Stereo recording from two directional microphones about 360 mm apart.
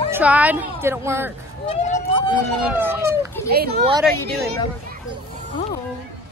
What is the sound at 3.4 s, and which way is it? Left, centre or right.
Speech, right.